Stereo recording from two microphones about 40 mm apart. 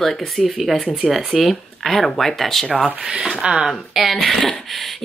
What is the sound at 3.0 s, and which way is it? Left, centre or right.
Speech, centre.